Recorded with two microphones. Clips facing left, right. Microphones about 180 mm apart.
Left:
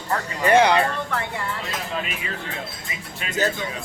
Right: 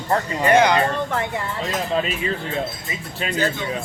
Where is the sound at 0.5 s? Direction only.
30° left (ahead or behind).